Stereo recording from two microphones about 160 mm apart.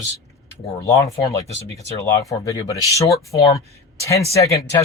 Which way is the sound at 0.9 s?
20° left (ahead or behind).